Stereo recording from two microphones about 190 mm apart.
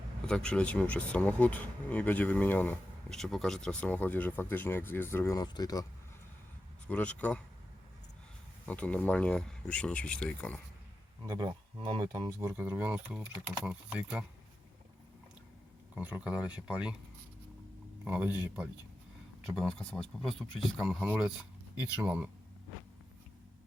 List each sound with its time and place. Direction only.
0.3 s speech: 5° left (ahead or behind); by 5.8 s 20° left (ahead or behind)
6.8 s speech: 5° left (ahead or behind)
8.6 s speech: 5° left (ahead or behind)
11.2 s speech: 25° right (ahead or behind); by 14.3 s 5° right (ahead or behind)
16.0 s speech: 10° right (ahead or behind)
18.0 s speech: 10° right (ahead or behind)
19.5 s speech: 5° left (ahead or behind)